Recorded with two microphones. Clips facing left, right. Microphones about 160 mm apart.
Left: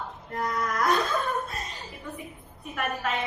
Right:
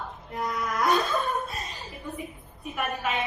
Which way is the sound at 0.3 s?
Centre (ahead or behind).